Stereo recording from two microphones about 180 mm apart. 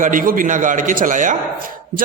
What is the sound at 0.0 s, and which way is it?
A man's voice, 50° right (ahead or behind).